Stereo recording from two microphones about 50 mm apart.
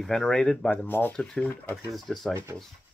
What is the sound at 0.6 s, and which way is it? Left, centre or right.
Speech, left.